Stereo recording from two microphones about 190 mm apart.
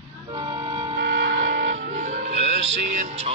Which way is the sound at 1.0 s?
70° right (ahead or behind).